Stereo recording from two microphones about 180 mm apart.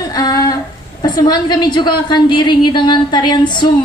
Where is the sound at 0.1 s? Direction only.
20° left (ahead or behind).